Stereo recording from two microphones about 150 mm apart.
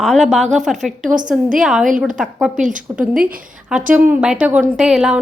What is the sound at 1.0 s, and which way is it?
Speech, 60° right (ahead or behind).